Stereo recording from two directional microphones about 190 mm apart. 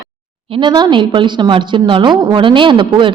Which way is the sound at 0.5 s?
25° right (ahead or behind).